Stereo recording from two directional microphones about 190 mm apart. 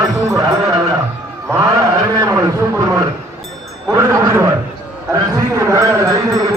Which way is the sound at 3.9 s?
20° right (ahead or behind).